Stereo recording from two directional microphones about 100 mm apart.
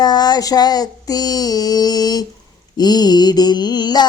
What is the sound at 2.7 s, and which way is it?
Mantra, 40° left (ahead or behind).